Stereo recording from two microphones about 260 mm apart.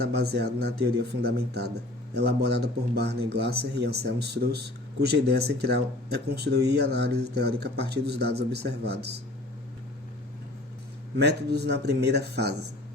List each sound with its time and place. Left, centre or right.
0.0 s speech: right
11.2 s speech: right